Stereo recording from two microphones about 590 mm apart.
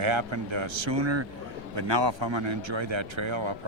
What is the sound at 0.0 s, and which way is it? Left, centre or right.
A man's voice, right.